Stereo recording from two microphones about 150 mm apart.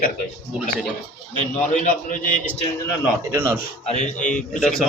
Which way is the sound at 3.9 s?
55° left (ahead or behind).